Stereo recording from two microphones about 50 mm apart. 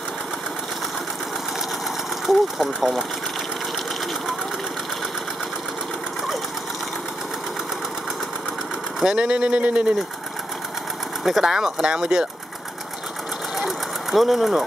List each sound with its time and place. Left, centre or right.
2.2 s speech: centre
9.0 s speech: centre
11.2 s speech: centre
13.6 s sewing machine: centre